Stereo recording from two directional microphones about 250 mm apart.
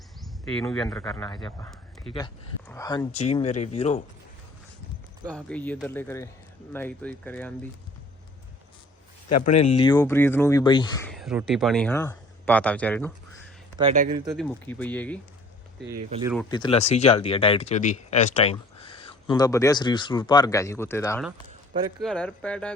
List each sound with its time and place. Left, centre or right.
0.4 s speech: centre
1.3 s speech: centre
3.1 s speech: left
5.2 s speech: centre
9.4 s speech: left
11.1 s speech: centre
13.9 s speech: right
14.3 s speech: centre
16.5 s speech: centre
21.7 s speech: centre
22.0 s speech: centre